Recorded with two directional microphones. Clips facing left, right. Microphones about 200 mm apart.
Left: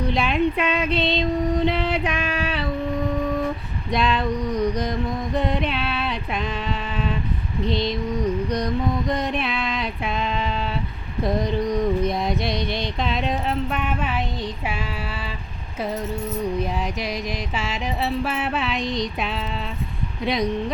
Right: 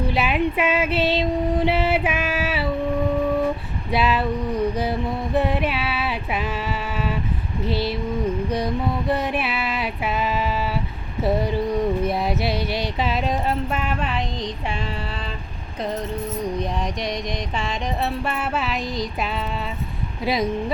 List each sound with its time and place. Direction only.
0.0 s music: 5° right (ahead or behind)
3.9 s music: 5° right (ahead or behind)
7.6 s speech: 5° right (ahead or behind)
8.4 s a sound: 5° right (ahead or behind)
17.6 s music: 5° left (ahead or behind)